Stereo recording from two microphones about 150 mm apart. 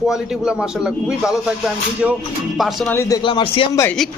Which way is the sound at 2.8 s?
15° left (ahead or behind).